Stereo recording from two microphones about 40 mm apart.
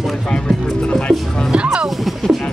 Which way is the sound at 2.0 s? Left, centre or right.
Centre.